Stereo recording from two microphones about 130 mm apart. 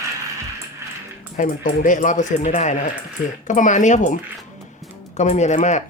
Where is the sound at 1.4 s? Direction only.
75° left (ahead or behind).